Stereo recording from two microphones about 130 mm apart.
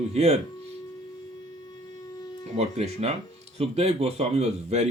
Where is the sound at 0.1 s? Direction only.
55° right (ahead or behind).